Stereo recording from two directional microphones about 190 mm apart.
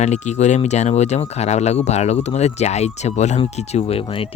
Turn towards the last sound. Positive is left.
turn(degrees=30)  # may be behind; listen again after turning